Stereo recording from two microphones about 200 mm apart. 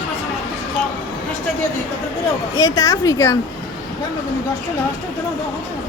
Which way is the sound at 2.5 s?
15° left (ahead or behind).